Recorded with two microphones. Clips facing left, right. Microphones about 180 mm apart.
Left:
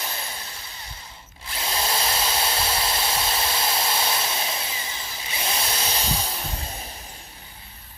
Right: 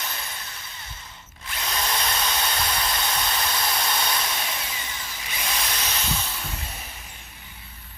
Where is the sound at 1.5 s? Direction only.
30° left (ahead or behind).